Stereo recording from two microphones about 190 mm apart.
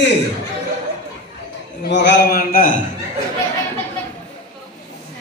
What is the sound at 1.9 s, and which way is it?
Speech, 65° left (ahead or behind).